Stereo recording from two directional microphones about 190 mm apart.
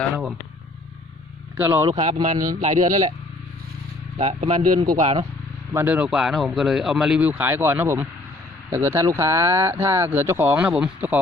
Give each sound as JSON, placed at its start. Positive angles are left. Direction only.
{"t": 1.5, "sound": "speech", "side_deg": -10}
{"t": 1.9, "sound": "speech", "side_deg": -30}
{"t": 2.3, "sound": "speech", "side_deg": -20}
{"t": 2.6, "sound": "speech", "side_deg": -40}
{"t": 4.2, "sound": "speech", "side_deg": -30}
{"t": 5.7, "sound": "speech", "side_deg": -10}